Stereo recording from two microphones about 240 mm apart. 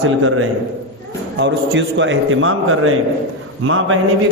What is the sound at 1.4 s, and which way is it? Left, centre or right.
A man's voice, right.